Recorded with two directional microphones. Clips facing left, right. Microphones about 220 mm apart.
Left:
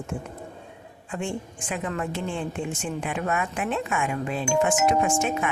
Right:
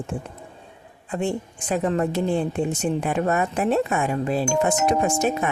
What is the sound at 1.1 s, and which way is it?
A woman's voice, 35° right (ahead or behind).